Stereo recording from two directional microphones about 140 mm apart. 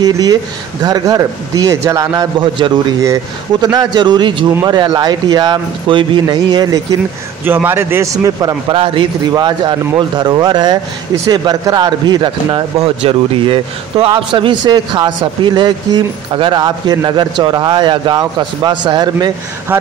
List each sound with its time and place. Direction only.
0.0 s speech: 30° right (ahead or behind)
3.6 s a man's voice: 30° right (ahead or behind)
7.4 s speech: 15° right (ahead or behind)
8.7 s a man's voice: 40° right (ahead or behind)
12.7 s a man's voice: 45° right (ahead or behind)